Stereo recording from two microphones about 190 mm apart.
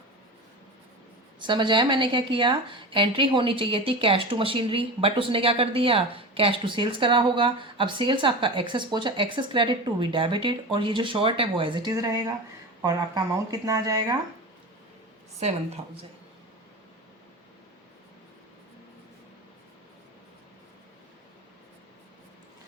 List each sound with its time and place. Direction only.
1.4 s a woman's voice: 25° right (ahead or behind)
15.4 s speech: 35° right (ahead or behind)